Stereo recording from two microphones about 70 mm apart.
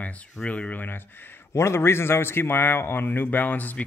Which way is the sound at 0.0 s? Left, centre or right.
Centre.